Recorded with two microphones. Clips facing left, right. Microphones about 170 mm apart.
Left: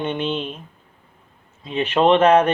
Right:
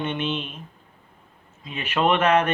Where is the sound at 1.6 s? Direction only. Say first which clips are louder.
Left 6 dB; 30° left (ahead or behind).